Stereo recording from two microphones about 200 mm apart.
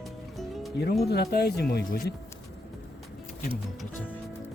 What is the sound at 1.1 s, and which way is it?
Speech, 55° left (ahead or behind).